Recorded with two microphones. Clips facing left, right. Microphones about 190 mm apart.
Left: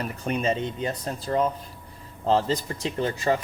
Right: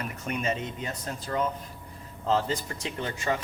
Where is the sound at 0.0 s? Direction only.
35° left (ahead or behind).